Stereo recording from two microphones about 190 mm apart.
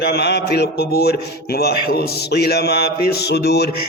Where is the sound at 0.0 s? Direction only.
60° left (ahead or behind).